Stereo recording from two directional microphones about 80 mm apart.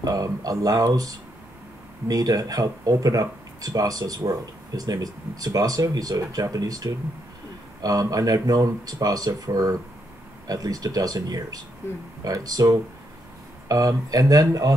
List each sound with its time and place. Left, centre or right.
0.0 s speech: right